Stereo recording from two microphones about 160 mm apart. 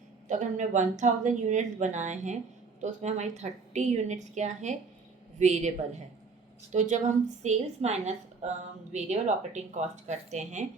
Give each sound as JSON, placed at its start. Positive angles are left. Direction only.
{"t": 0.3, "sound": "a woman's voice", "side_deg": -50}